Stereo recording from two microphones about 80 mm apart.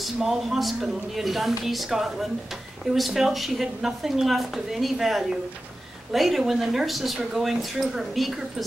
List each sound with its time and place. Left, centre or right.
0.0 s a woman's voice: centre